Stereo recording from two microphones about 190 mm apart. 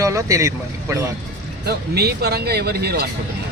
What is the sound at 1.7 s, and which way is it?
Speech, 55° right (ahead or behind).